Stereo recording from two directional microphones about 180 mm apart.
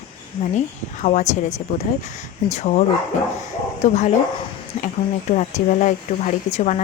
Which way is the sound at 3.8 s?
40° left (ahead or behind).